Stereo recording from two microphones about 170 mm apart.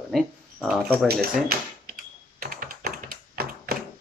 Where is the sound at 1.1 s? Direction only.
65° right (ahead or behind).